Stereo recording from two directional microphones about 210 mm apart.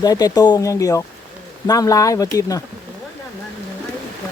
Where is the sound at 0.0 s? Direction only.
20° left (ahead or behind).